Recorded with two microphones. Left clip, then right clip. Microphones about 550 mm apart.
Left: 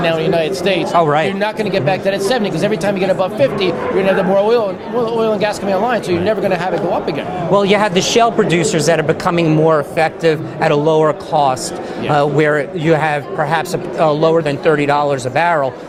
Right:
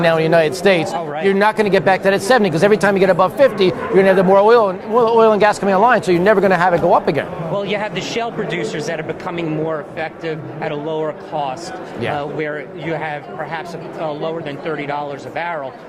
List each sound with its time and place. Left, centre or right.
0.0 s speech: right
7.5 s a man's voice: left